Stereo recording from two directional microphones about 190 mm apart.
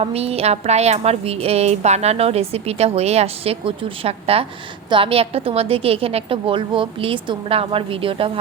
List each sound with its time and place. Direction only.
0.0 s a woman's voice: 30° right (ahead or behind)